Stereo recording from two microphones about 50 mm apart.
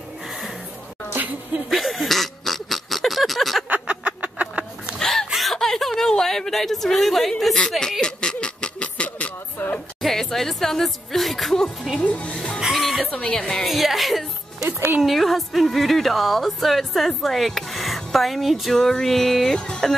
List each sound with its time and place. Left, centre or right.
1.7 s oink: centre
3.8 s fowl: right
4.9 s hiccup: centre
5.3 s a sound: centre
8.0 s a sound: centre
9.6 s music: left
10.0 s speech: centre
12.0 s speech: left
12.5 s music: centre
13.1 s speech: centre
13.7 s music: centre
14.7 s music: right
15.0 s a woman's voice: centre
18.8 s speech: centre